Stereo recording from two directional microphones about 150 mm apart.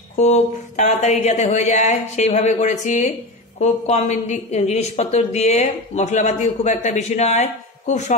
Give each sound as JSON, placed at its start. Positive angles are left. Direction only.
{"t": 0.2, "sound": "a woman's voice", "side_deg": 50}